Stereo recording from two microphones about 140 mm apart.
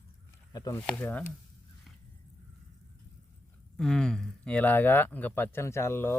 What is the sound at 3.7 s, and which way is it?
Speech, 5° left (ahead or behind).